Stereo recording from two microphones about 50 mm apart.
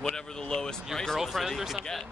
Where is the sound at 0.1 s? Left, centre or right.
Centre.